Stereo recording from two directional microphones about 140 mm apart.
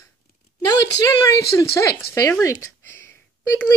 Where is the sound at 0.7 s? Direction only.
25° left (ahead or behind).